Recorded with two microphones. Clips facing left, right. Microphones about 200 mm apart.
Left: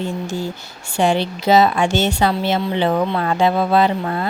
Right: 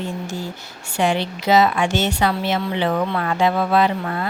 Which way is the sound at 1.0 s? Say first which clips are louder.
Left 3 dB; 30° left (ahead or behind).